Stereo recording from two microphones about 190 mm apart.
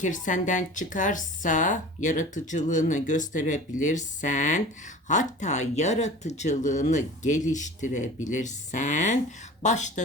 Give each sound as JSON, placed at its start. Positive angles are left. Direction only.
{"t": 0.0, "sound": "speech", "side_deg": 40}